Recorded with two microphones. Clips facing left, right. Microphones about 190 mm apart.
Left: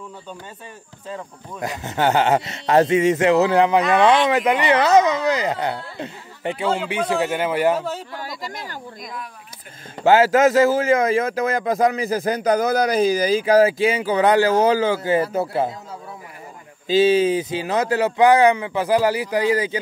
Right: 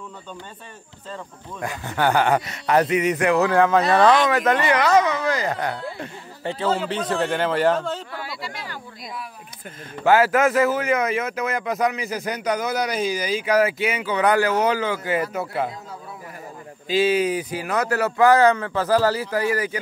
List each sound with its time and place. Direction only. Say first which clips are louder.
1.6 s a man's voice: left 2 dB; 20° left (ahead or behind)
8.2 s speech: left 2 dB; 40° left (ahead or behind)
9.9 s a man's voice: left 3 dB; 25° left (ahead or behind)
16.8 s speech: left 4 dB; 25° left (ahead or behind)